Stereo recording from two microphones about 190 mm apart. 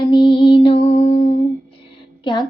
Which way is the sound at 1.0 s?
40° left (ahead or behind).